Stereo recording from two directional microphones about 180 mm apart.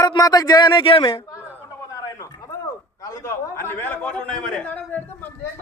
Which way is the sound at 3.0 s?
20° left (ahead or behind).